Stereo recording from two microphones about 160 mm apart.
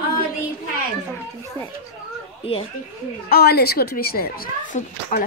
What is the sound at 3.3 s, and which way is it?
A woman's voice, 75° left (ahead or behind).